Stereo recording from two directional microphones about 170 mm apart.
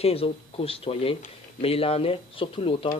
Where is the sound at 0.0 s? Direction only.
35° left (ahead or behind).